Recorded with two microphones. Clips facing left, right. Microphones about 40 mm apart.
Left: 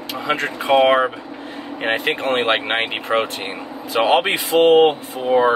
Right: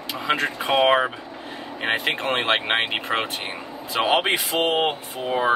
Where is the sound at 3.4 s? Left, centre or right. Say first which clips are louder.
Left 4 dB; left.